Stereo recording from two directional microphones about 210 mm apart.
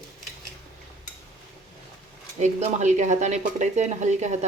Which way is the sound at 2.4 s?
35° right (ahead or behind).